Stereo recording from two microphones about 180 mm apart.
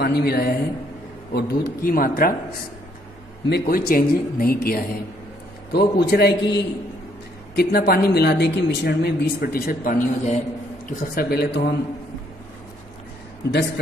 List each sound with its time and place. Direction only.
0.0 s speech: 60° left (ahead or behind)
3.4 s speech: 60° left (ahead or behind)